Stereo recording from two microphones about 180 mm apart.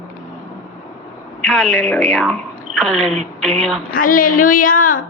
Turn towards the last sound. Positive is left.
turn(degrees=50)  # may be behind; listen again after turning